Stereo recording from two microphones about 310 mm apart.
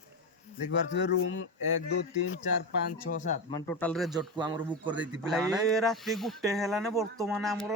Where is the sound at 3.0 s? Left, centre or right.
Left.